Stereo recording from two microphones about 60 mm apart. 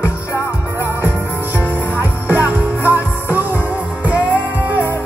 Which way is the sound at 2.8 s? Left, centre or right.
Left.